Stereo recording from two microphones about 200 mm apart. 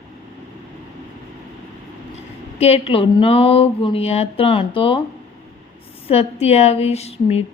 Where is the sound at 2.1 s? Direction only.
30° left (ahead or behind).